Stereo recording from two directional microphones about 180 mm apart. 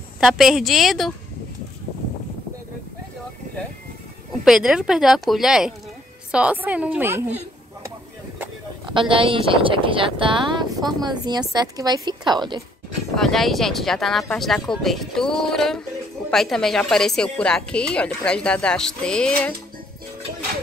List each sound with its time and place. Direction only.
0.2 s a woman's voice: centre (ahead or behind)
4.5 s a woman's voice: 5° right (ahead or behind)
9.1 s speech: 30° right (ahead or behind)
13.1 s a woman's voice: centre (ahead or behind)